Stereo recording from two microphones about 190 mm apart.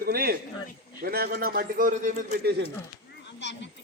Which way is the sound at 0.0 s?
50° right (ahead or behind).